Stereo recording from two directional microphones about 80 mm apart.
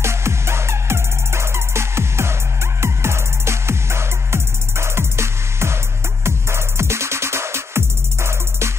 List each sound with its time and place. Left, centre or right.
0.0 s music: right